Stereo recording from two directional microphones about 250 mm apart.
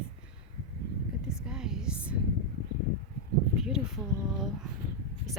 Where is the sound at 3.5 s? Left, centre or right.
Centre.